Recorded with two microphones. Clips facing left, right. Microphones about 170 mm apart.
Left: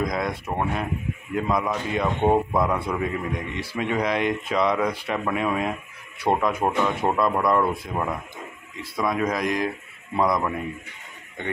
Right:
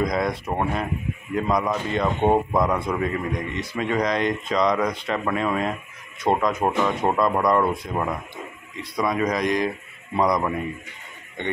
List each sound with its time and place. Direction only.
0.0 s speech: centre (ahead or behind)
8.9 s speech: 5° left (ahead or behind)